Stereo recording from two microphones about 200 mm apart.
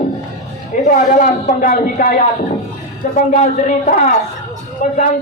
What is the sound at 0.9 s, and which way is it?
Speech, 40° left (ahead or behind).